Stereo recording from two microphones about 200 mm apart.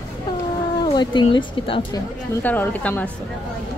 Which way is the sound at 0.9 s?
25° left (ahead or behind).